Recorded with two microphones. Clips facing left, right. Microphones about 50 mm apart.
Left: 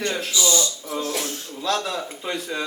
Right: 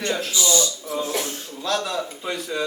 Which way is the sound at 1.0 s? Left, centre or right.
Right.